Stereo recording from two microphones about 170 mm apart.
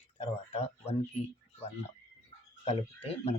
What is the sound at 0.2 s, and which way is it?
Speech, 35° left (ahead or behind).